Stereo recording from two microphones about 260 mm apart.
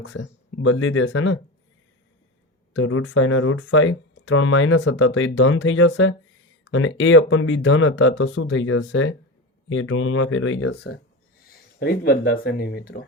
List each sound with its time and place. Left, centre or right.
0.2 s speech: left
2.7 s speech: left